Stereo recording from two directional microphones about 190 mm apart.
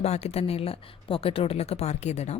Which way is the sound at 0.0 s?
35° left (ahead or behind).